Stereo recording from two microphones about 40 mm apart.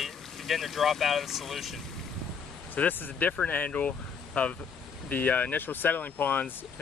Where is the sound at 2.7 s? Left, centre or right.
Left.